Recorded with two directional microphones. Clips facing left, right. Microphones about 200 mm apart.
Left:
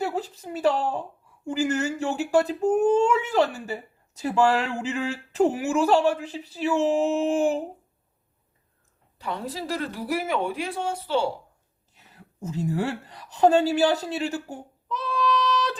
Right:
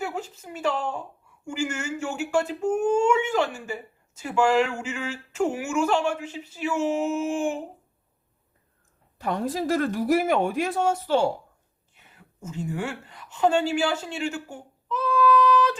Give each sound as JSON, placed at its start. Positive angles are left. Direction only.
{"t": 0.0, "sound": "speech", "side_deg": 35}
{"t": 9.1, "sound": "speech", "side_deg": -50}
{"t": 11.9, "sound": "a woman's voice", "side_deg": 35}